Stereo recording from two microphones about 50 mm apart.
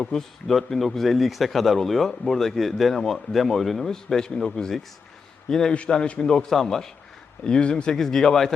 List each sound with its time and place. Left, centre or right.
0.0 s a man's voice: centre